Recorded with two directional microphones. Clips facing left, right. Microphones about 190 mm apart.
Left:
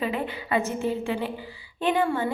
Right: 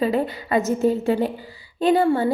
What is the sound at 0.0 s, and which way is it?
A woman's voice, 40° right (ahead or behind).